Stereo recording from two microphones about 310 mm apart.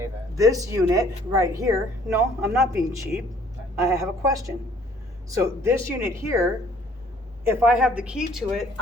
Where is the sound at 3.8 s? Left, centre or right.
Centre.